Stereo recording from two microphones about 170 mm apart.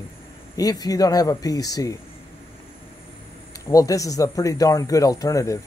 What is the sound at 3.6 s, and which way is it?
A man's voice, 20° left (ahead or behind).